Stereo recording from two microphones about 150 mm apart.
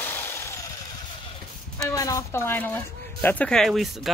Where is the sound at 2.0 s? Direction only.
20° left (ahead or behind).